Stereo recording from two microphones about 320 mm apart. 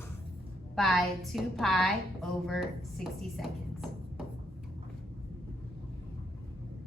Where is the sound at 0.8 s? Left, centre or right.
Centre.